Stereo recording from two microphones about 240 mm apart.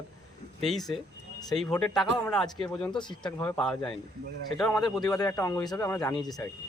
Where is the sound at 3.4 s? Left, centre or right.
Centre.